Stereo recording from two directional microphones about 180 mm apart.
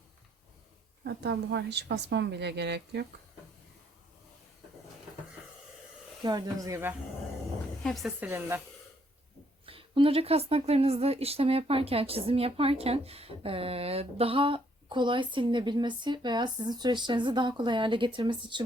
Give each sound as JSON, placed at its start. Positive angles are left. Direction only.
{"t": 1.0, "sound": "a woman's voice", "side_deg": -65}
{"t": 6.2, "sound": "speech", "side_deg": -20}
{"t": 7.9, "sound": "speech", "side_deg": 0}
{"t": 9.6, "sound": "a woman's voice", "side_deg": -30}